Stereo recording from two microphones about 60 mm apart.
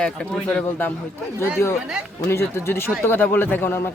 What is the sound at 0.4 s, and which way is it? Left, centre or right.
Speech, left.